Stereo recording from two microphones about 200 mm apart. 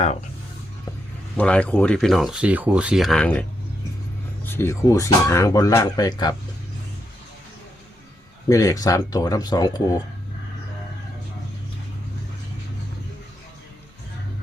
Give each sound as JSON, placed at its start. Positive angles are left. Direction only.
{"t": 1.4, "sound": "speech", "side_deg": 5}
{"t": 4.4, "sound": "speech", "side_deg": 15}
{"t": 8.4, "sound": "speech", "side_deg": 15}